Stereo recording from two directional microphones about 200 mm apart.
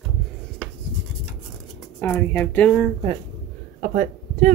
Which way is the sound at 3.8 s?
40° right (ahead or behind).